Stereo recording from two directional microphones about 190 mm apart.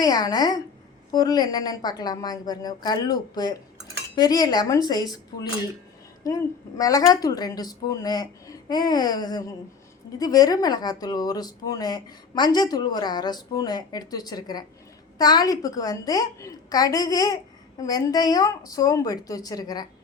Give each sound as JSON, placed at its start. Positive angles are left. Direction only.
{"t": 0.0, "sound": "a woman's voice", "side_deg": 20}